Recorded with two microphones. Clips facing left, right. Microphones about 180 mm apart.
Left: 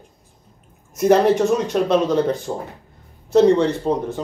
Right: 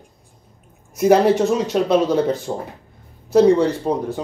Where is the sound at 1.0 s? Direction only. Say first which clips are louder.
Right 1 dB; 5° right (ahead or behind).